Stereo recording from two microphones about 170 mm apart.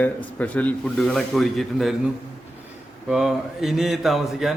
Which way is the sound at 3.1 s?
Centre (ahead or behind).